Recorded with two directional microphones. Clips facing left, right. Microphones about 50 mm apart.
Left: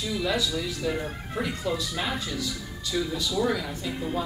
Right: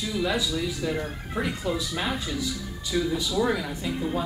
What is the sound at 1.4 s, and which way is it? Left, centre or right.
Speech, centre.